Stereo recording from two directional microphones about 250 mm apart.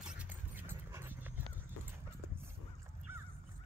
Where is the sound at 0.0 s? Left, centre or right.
Centre.